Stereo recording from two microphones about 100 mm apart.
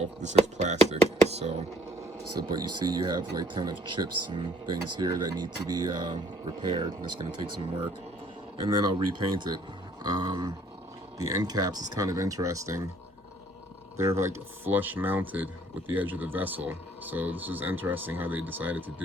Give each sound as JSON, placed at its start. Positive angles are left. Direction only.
{"t": 0.3, "sound": "speech", "side_deg": -90}
{"t": 2.5, "sound": "speech", "side_deg": -45}
{"t": 8.8, "sound": "speech", "side_deg": -50}
{"t": 13.9, "sound": "speech", "side_deg": -30}